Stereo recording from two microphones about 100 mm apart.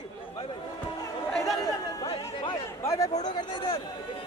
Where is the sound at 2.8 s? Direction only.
30° left (ahead or behind); by 3.8 s 50° left (ahead or behind).